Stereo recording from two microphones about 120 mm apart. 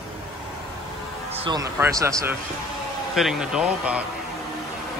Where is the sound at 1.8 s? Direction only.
25° right (ahead or behind).